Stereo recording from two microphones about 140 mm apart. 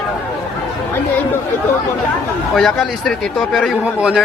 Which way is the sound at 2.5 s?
Centre (ahead or behind).